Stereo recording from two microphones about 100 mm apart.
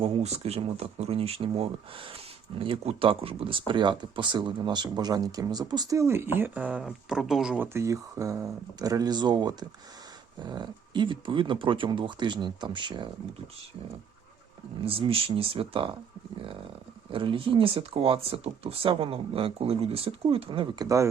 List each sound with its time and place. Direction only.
0.0 s speech: 80° right; by 7.6 s 5° right (ahead or behind)
7.6 s speech: 25° right (ahead or behind); by 13.1 s 50° right (ahead or behind)
14.8 s speech: 70° right (ahead or behind)
17.1 s speech: 60° right (ahead or behind)
20.3 s speech: 60° right (ahead or behind)
20.7 s speech: 35° right (ahead or behind)